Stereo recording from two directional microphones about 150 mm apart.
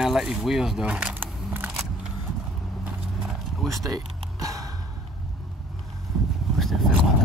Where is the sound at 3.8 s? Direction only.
25° right (ahead or behind).